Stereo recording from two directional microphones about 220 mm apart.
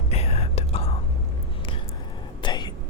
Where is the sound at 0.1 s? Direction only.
30° left (ahead or behind).